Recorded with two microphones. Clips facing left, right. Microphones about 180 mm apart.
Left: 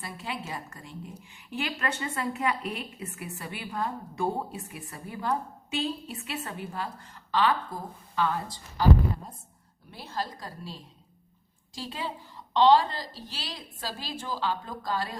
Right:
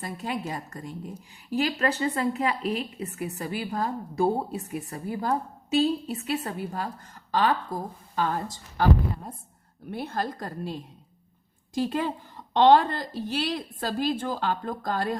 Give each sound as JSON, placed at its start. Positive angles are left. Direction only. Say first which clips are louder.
{"t": 0.0, "sound": "a woman's voice", "louder": "right 5 dB", "side_deg": -45}
{"t": 9.8, "sound": "a woman's voice", "louder": "right 5 dB", "side_deg": -55}